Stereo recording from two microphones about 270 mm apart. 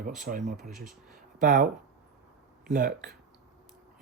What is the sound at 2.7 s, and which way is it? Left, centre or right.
Speech, right.